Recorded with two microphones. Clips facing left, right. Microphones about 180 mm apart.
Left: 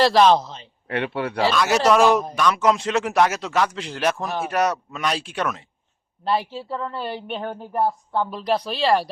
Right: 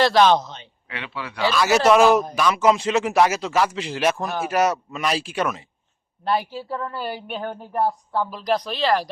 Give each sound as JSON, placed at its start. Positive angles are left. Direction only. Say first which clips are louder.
{"t": 0.0, "sound": "a man's voice", "louder": "left 1 dB", "side_deg": 0}
{"t": 0.9, "sound": "speech", "louder": "left 9 dB", "side_deg": 55}
{"t": 1.5, "sound": "a man's voice", "louder": "right 2 dB", "side_deg": 0}